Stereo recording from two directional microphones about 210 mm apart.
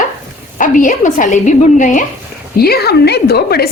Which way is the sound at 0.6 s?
40° left (ahead or behind).